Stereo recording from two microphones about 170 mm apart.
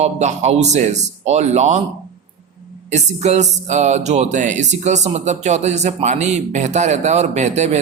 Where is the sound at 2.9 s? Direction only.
40° right (ahead or behind).